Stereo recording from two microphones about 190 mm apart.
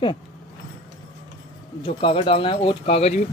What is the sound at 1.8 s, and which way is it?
Speech, 30° left (ahead or behind).